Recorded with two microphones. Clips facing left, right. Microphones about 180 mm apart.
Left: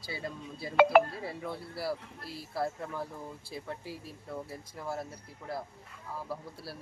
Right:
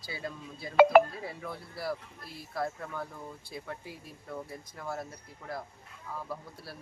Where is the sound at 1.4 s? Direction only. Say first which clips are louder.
Left 1 dB; 30° left (ahead or behind).